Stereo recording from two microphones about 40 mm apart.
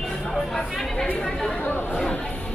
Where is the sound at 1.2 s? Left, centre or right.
Centre.